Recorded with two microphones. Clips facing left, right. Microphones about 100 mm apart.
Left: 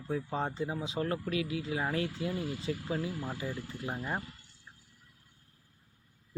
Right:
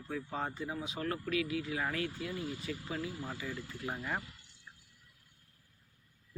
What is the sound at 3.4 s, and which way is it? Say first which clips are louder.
Speech: left 3 dB; 20° left (ahead or behind).